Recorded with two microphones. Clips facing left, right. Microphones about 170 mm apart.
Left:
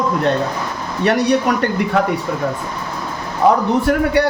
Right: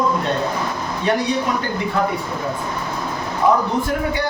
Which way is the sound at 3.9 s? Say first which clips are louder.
Left 7 dB; 60° left (ahead or behind).